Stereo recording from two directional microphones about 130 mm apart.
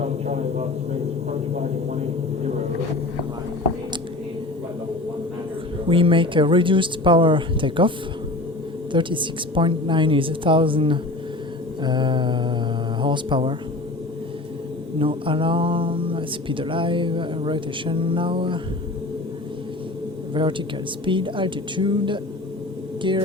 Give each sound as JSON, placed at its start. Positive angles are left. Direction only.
{"t": 0.0, "sound": "a sound", "side_deg": -55}
{"t": 5.9, "sound": "speech", "side_deg": -40}
{"t": 14.9, "sound": "speech", "side_deg": -40}
{"t": 20.3, "sound": "a man's voice", "side_deg": -40}